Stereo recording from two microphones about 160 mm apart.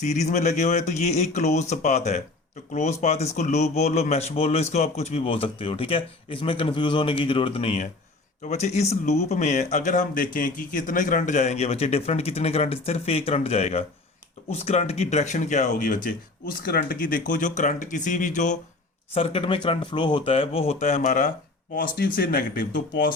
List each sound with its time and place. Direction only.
0.0 s a man's voice: 45° left (ahead or behind)
19.1 s a man's voice: 35° left (ahead or behind)
21.8 s speech: 65° left (ahead or behind)